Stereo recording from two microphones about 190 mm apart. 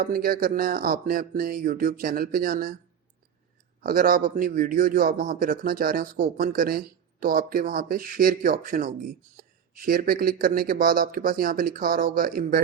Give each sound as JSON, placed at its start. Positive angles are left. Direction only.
{"t": 0.0, "sound": "a man's voice", "side_deg": -50}
{"t": 3.8, "sound": "a man's voice", "side_deg": -50}